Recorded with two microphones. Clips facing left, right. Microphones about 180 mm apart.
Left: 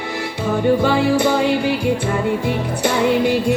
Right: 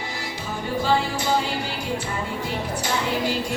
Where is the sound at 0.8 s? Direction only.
60° left (ahead or behind).